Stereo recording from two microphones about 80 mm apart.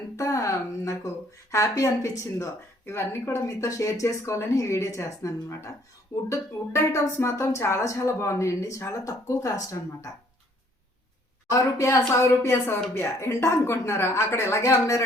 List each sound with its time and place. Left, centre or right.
0.2 s a woman's voice: left
11.5 s a woman's voice: left